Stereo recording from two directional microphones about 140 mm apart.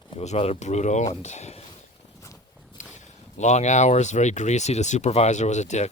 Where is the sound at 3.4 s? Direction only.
55° left (ahead or behind).